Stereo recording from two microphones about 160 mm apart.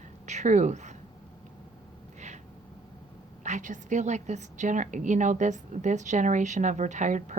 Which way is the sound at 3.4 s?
50° right (ahead or behind).